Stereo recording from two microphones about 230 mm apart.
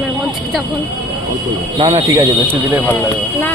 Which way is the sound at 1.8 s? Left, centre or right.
Centre.